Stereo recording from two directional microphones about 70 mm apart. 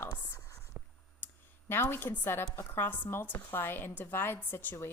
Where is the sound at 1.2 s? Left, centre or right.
Left.